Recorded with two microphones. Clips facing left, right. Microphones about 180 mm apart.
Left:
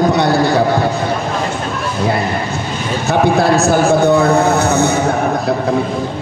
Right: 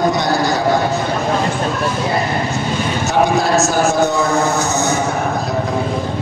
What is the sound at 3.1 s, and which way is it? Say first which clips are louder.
A man's voice: left 3 dB; 60° left (ahead or behind).